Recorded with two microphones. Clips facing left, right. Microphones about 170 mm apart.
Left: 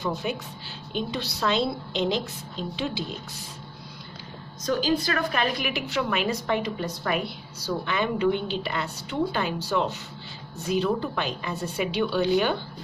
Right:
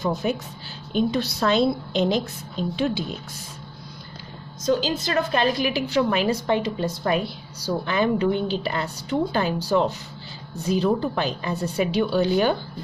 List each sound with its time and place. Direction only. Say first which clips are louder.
0.0 s a woman's voice: right 4 dB; 40° right (ahead or behind)
4.6 s a woman's voice: right 2 dB; 25° right (ahead or behind); by 12.5 s 40° right (ahead or behind)